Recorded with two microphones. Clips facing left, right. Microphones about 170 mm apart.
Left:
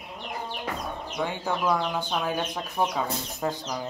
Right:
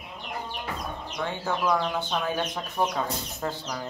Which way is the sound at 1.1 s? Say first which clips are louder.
Left 1 dB; 10° left (ahead or behind).